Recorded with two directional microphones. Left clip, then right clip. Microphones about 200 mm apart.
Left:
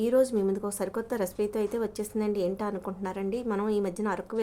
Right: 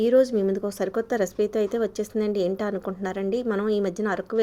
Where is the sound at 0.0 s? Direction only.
15° right (ahead or behind).